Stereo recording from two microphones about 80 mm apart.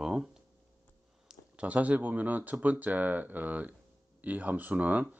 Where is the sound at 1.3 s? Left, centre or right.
Centre.